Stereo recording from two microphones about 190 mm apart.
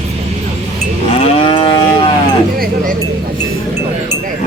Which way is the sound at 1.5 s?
25° left (ahead or behind).